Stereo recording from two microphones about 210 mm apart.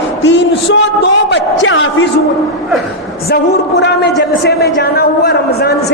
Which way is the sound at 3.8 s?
50° left (ahead or behind).